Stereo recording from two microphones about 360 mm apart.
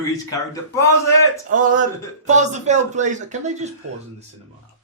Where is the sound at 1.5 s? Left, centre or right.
Right.